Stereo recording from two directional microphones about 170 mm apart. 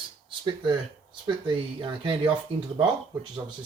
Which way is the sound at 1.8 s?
30° right (ahead or behind).